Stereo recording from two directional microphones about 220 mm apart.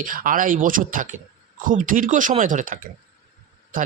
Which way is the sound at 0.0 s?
40° right (ahead or behind).